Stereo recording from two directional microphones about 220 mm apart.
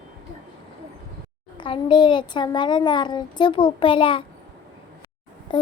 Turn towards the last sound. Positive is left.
turn(degrees=20)  # may be behind; listen again after turning